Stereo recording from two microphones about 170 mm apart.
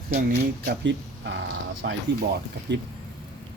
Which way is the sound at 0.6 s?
90° right.